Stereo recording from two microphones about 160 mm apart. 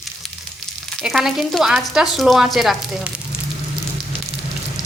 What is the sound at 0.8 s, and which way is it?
Speech, centre (ahead or behind).